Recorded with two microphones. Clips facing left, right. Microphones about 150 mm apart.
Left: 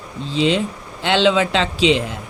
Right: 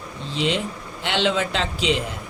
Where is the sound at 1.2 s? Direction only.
90° left.